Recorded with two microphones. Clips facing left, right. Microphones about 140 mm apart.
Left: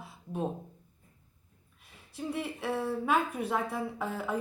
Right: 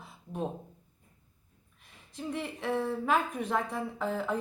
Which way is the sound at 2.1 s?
5° left (ahead or behind).